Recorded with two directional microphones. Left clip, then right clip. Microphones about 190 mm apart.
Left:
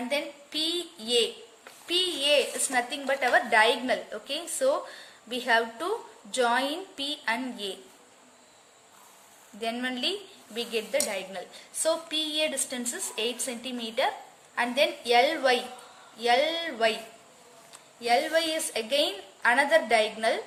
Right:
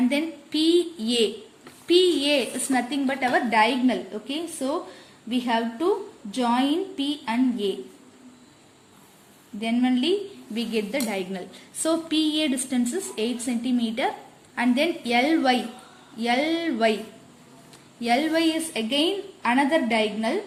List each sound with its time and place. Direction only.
0.1 s a woman's voice: centre (ahead or behind); by 7.8 s 20° left (ahead or behind)
9.6 s a woman's voice: 15° left (ahead or behind)
10.9 s a woman's voice: centre (ahead or behind)
12.8 s a woman's voice: 15° left (ahead or behind)
18.0 s a woman's voice: 5° right (ahead or behind); by 20.4 s 15° left (ahead or behind)